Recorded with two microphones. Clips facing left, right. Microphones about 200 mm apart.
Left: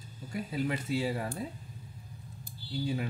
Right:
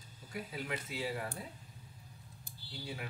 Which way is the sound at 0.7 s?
35° left (ahead or behind).